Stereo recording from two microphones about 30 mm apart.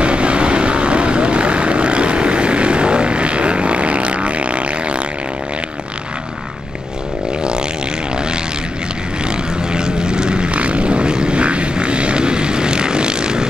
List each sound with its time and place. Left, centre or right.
0.0 s vehicle: right
9.2 s vehicle: right
10.5 s vehicle: right